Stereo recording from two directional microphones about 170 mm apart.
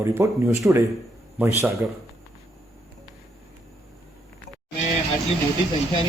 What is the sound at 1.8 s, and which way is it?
Speech, 15° right (ahead or behind).